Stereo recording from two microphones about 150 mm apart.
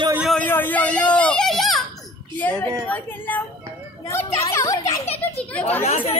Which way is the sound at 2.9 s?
10° left (ahead or behind).